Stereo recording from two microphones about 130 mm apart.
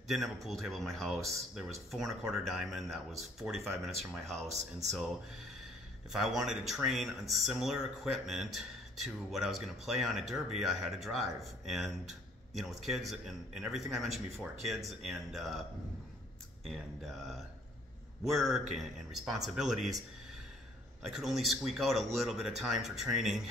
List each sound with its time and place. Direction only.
0.1 s speech: centre (ahead or behind)
6.1 s speech: centre (ahead or behind)
16.6 s speech: centre (ahead or behind)
21.0 s speech: centre (ahead or behind)